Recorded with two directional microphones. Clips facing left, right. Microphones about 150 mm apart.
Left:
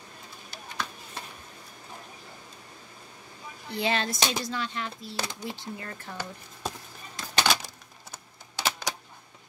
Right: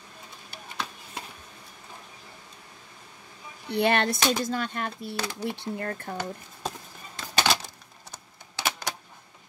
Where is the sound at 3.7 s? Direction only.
60° right (ahead or behind).